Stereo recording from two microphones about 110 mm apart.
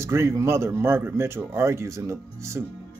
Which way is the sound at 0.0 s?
25° right (ahead or behind).